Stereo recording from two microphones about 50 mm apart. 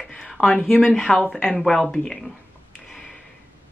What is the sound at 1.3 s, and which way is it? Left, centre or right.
Speech, centre.